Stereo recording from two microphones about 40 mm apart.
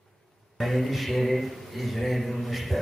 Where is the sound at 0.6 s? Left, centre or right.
Centre.